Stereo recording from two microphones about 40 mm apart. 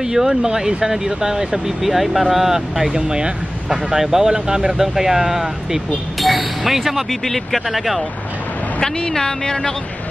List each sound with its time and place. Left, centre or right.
0.0 s speech: centre
8.8 s speech: centre